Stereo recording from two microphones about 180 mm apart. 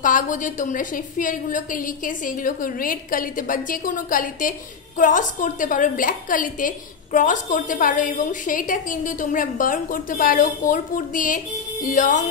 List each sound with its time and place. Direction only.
0.0 s a woman's voice: 45° left (ahead or behind)